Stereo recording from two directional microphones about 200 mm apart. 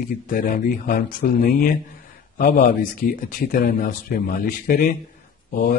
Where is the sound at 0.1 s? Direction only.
45° left (ahead or behind).